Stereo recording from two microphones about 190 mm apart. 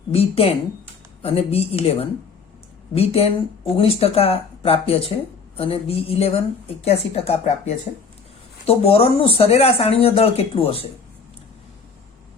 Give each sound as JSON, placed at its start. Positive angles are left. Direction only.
{"t": 0.1, "sound": "speech", "side_deg": 30}